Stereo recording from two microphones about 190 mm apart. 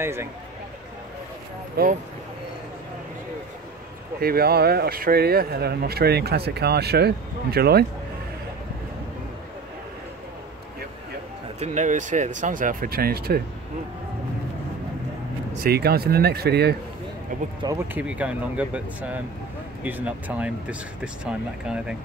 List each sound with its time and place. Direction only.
0.0 s speech: 10° right (ahead or behind)
1.8 s speech: 55° right (ahead or behind)
4.2 s speech: 55° right (ahead or behind)
11.6 s speech: 40° right (ahead or behind)
15.6 s speech: 55° right (ahead or behind)
17.3 s a sound: 45° right (ahead or behind)
17.6 s speech: 10° right (ahead or behind)